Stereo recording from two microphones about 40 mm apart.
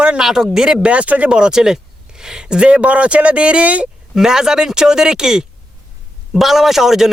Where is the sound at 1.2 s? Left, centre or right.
Right.